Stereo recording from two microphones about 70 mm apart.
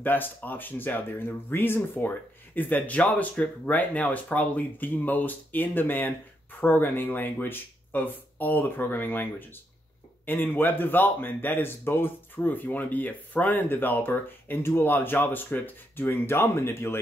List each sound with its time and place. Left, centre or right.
0.0 s speech: left